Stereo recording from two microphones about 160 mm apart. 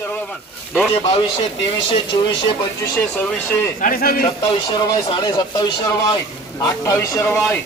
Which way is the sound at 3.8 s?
65° left (ahead or behind).